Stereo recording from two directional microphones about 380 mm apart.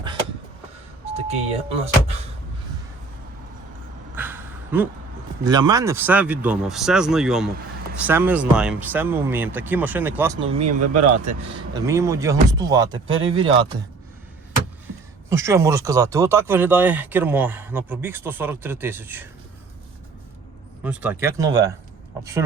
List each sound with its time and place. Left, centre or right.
1.1 s speech: centre
4.1 s a sound: centre
5.4 s speech: centre
15.3 s speech: centre
20.8 s speech: centre